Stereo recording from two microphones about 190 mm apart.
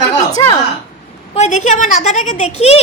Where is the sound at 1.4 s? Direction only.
40° left (ahead or behind).